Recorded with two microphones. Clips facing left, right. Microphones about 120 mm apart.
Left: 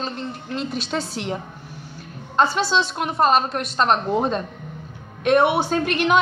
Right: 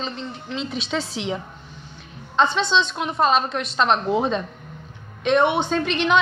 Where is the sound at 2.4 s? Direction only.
5° left (ahead or behind).